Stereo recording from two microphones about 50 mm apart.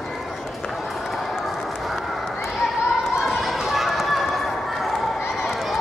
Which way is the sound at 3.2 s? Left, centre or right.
Centre.